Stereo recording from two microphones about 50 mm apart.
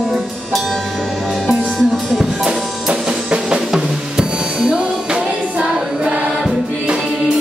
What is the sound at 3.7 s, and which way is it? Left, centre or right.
Drum, centre.